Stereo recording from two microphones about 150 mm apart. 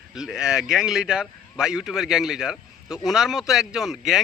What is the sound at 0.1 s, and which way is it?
A man's voice, 5° right (ahead or behind).